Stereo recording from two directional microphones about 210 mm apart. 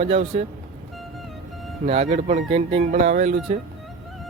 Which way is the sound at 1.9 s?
30° right (ahead or behind).